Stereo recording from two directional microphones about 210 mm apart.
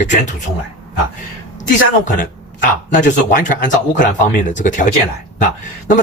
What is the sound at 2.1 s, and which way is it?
Speech, 40° left (ahead or behind).